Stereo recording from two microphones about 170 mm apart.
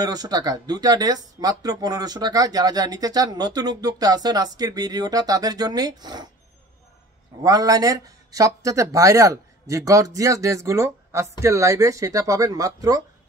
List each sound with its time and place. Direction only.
0.0 s speech: 20° right (ahead or behind)
7.4 s speech: 20° right (ahead or behind)